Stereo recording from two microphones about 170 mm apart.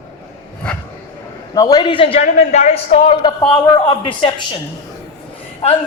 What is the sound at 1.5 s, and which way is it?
A man's voice, 20° left (ahead or behind).